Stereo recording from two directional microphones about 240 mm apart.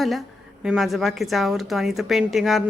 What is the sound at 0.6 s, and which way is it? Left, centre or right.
A woman's voice, centre.